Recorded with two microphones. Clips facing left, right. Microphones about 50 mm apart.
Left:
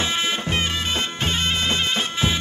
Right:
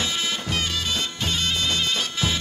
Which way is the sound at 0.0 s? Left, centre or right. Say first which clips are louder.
Left 3 dB; left.